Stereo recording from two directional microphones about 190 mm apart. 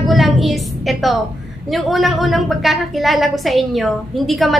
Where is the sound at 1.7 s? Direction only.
Centre (ahead or behind).